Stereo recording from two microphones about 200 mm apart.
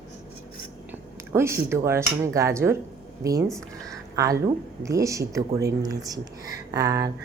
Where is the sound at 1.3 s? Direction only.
15° right (ahead or behind).